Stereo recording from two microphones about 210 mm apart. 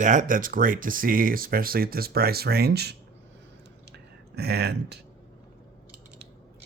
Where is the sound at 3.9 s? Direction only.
50° right (ahead or behind).